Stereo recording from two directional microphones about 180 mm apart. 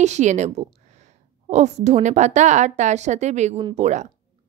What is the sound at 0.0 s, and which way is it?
A woman's voice, 40° right (ahead or behind).